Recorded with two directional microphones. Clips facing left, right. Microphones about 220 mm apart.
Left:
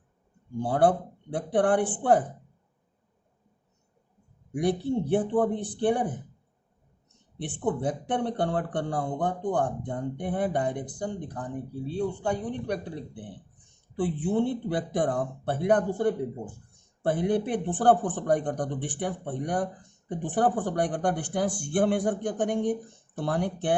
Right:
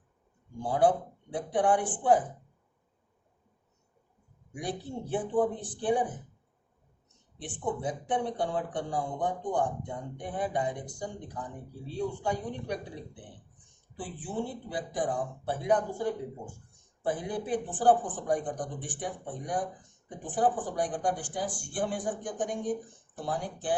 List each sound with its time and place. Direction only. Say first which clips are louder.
0.6 s speech: left 2 dB; 60° left (ahead or behind)
4.8 s speech: left 8 dB; 65° left (ahead or behind)
7.3 s speech: left 5 dB; 60° left (ahead or behind)
13.9 s speech: left 9 dB; 60° left (ahead or behind)